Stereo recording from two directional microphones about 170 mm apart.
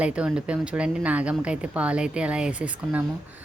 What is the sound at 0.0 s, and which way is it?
A woman's voice, 5° right (ahead or behind).